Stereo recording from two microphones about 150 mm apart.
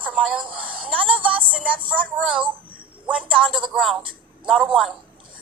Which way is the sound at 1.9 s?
5° right (ahead or behind).